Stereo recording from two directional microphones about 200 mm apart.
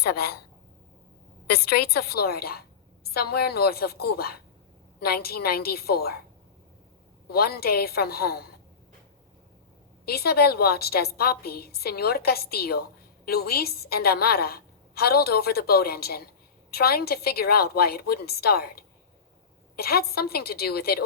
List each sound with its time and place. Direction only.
0.0 s a woman's voice: 50° left (ahead or behind)
1.5 s a woman's voice: 50° left (ahead or behind)
7.3 s a woman's voice: 50° left (ahead or behind)
10.1 s a woman's voice: 50° left (ahead or behind)